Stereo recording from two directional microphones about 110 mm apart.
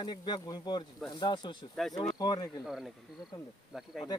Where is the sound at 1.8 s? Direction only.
5° left (ahead or behind).